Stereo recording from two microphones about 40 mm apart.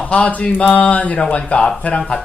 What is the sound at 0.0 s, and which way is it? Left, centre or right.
Mantra, left.